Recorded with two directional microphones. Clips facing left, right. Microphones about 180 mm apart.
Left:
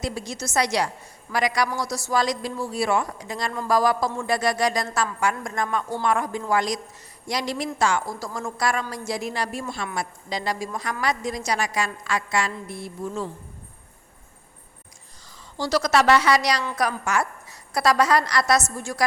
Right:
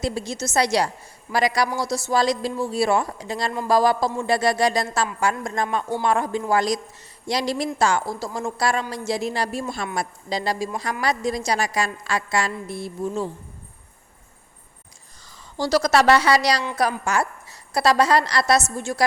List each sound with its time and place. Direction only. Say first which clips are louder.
0.0 s a woman's voice: right 4 dB; 30° right (ahead or behind)
15.5 s a woman's voice: right 2 dB; 35° right (ahead or behind)